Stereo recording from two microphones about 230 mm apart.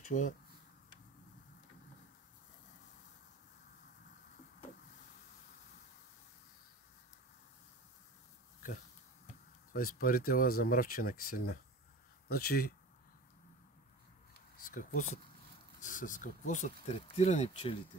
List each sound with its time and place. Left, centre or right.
0.0 s speech: left
9.9 s speech: left
14.6 s speech: left